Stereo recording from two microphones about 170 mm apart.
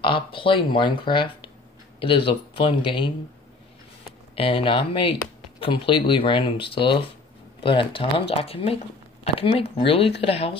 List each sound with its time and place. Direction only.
0.0 s speech: 30° left (ahead or behind)
4.4 s speech: 30° left (ahead or behind)